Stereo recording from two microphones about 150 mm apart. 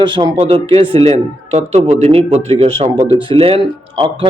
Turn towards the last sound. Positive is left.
turn(degrees=-35)  # may be behind; listen again after turning